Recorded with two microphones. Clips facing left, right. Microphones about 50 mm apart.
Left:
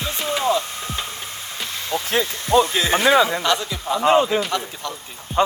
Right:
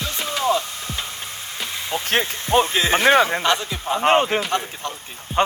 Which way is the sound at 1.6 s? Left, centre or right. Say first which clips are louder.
Right 1 dB; centre.